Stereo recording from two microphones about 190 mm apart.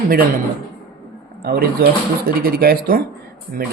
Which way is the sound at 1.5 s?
55° right (ahead or behind).